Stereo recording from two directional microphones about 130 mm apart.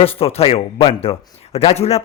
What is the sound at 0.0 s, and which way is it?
Speech, 50° left (ahead or behind).